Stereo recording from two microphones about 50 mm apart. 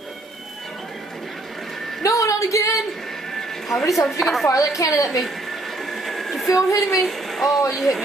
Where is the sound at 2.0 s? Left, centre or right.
Left.